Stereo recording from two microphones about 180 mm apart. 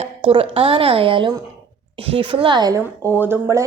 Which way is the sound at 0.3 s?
30° right (ahead or behind).